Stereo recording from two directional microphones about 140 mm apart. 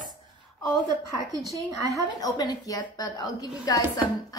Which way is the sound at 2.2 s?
25° left (ahead or behind).